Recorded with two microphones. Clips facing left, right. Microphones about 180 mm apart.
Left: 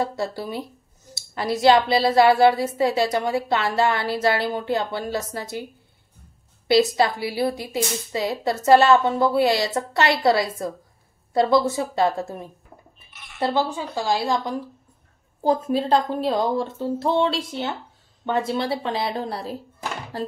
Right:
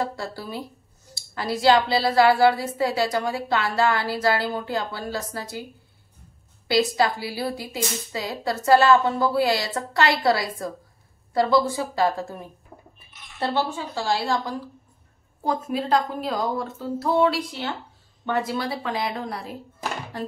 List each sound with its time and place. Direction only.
0.0 s a woman's voice: 20° left (ahead or behind)
6.7 s a woman's voice: 25° left (ahead or behind)
15.4 s a woman's voice: 30° left (ahead or behind)